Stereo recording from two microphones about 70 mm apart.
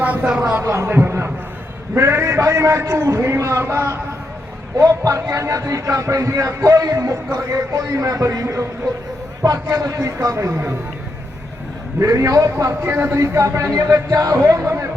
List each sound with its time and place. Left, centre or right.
0.0 s a sound: right
0.3 s a man's voice: centre
0.6 s a man's voice: right
4.8 s speech: right
11.9 s speech: right
12.8 s speech: right
13.1 s speech: right